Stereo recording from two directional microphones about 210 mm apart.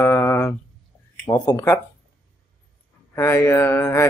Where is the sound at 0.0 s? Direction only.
10° left (ahead or behind).